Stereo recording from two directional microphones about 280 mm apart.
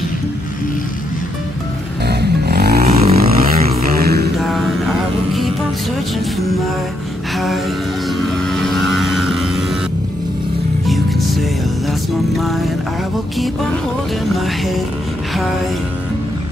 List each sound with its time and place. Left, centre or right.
2.0 s a sound: right
4.0 s mantra: right
7.3 s a sound: centre
8.4 s vehicle: centre
10.9 s music: centre
14.3 s music: centre